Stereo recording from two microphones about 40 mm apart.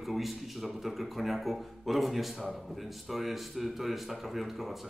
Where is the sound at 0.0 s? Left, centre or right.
Centre.